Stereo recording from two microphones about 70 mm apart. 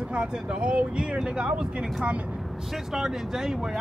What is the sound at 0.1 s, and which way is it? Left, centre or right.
Speech, centre.